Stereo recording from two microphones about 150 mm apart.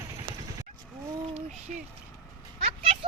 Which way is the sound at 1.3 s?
45° right (ahead or behind).